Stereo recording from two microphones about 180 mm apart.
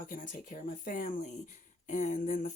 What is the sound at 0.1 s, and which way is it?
Speech, 45° left (ahead or behind).